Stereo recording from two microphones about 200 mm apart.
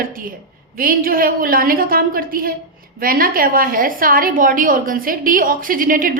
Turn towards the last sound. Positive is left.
turn(degrees=-45)  # may be behind; listen again after turning